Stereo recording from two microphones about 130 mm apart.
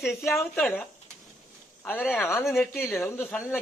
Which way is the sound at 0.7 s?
10° left (ahead or behind).